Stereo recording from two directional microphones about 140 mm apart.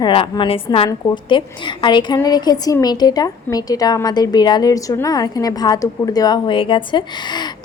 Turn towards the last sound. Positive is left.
turn(degrees=30)  # may be behind; listen again after turning